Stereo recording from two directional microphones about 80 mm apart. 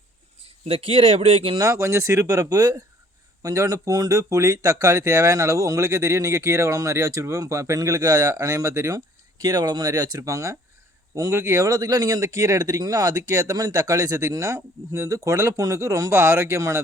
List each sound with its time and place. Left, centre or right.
1.7 s speech: right
9.4 s speech: right